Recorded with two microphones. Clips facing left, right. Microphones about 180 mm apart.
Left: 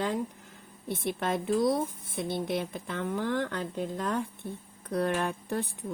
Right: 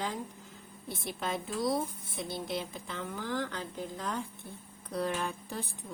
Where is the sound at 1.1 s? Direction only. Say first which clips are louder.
Left 7 dB; 55° left (ahead or behind).